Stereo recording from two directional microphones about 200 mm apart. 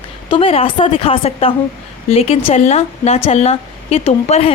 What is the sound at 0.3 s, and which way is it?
A woman's voice, 25° left (ahead or behind).